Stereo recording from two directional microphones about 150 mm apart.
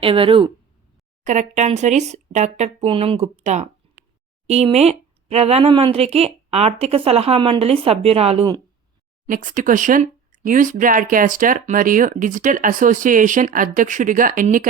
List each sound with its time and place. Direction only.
0.0 s speech: 35° right (ahead or behind)
1.2 s speech: 55° right (ahead or behind)
9.2 s speech: 60° right (ahead or behind)